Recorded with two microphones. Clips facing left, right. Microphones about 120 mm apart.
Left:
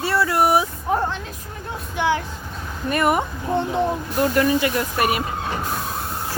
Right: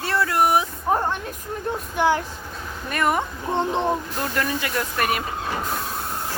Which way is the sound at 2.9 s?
5° left (ahead or behind).